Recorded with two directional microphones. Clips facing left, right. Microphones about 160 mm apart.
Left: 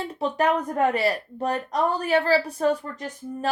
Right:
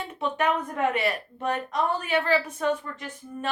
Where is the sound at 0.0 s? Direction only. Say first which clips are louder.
Left 3 dB; 35° left (ahead or behind).